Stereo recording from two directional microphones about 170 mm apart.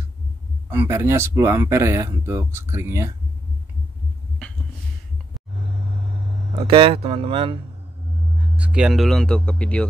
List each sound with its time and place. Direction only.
0.7 s speech: 15° right (ahead or behind)
6.7 s speech: 35° right (ahead or behind)
8.5 s speech: 5° right (ahead or behind)